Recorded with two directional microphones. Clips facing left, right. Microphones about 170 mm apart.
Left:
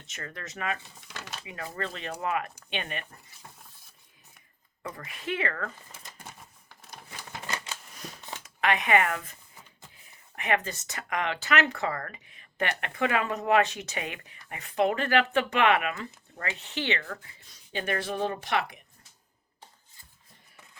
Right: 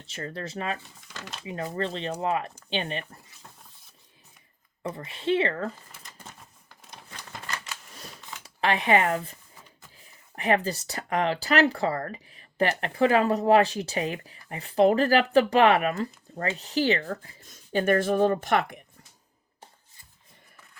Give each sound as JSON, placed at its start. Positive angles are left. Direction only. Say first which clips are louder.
{"t": 0.0, "sound": "a woman's voice", "louder": "right 6 dB", "side_deg": -30}
{"t": 4.8, "sound": "a woman's voice", "louder": "right 6 dB", "side_deg": -25}
{"t": 8.4, "sound": "speech", "louder": "right 3 dB", "side_deg": -30}
{"t": 10.3, "sound": "speech", "louder": "right 4 dB", "side_deg": -35}